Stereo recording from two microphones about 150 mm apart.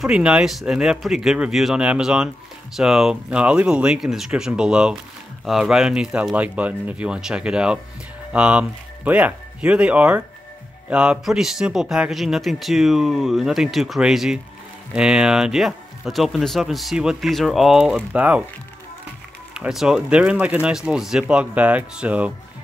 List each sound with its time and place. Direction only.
0.0 s speech: 5° right (ahead or behind)
19.5 s speech: 5° right (ahead or behind)